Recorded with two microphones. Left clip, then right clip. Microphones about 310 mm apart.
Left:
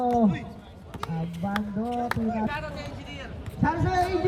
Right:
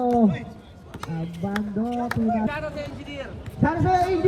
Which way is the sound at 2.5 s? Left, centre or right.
Centre.